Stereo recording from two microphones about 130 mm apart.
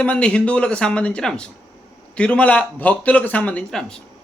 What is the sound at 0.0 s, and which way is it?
Speech, 10° left (ahead or behind).